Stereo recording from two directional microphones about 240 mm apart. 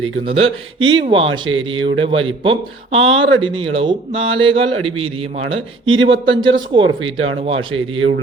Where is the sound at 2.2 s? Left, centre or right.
Right.